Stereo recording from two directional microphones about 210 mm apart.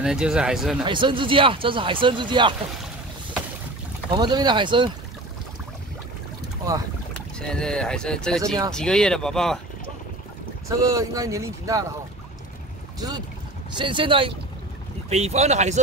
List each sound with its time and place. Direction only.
0.0 s speech: 5° right (ahead or behind)
0.8 s speech: 25° right (ahead or behind)
4.1 s speech: 20° right (ahead or behind)
7.2 s speech: 5° left (ahead or behind)
10.7 s speech: 15° right (ahead or behind)
13.7 s speech: 25° right (ahead or behind)